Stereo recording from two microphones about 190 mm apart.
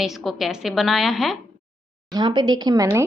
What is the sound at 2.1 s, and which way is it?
Speech, 25° right (ahead or behind).